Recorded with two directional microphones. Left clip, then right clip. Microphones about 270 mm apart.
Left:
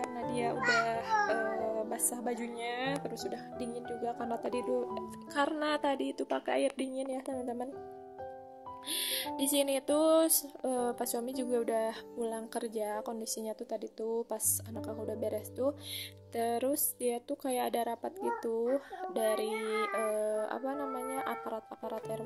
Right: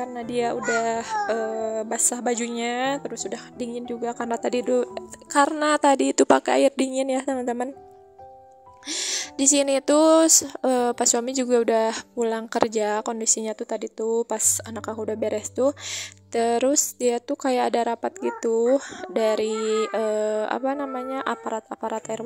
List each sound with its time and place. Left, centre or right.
0.1 s speech: right
8.8 s speech: right